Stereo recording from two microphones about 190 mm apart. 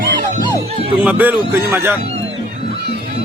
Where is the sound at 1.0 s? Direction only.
10° right (ahead or behind).